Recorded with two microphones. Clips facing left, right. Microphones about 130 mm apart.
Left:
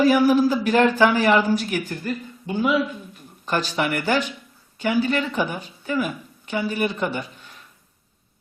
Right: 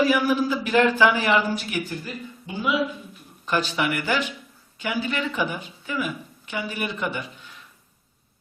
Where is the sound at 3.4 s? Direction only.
40° left (ahead or behind).